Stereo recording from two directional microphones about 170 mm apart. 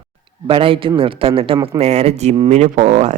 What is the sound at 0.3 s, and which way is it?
Speech, 30° right (ahead or behind).